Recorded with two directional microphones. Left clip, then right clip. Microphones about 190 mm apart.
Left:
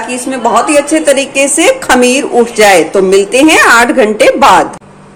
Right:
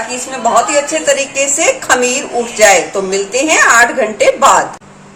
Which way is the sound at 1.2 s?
45° left (ahead or behind).